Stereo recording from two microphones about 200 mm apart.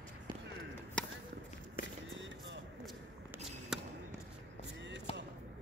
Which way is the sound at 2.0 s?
65° right (ahead or behind).